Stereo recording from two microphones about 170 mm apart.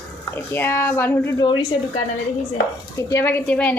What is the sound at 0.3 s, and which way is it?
Speech, 15° left (ahead or behind).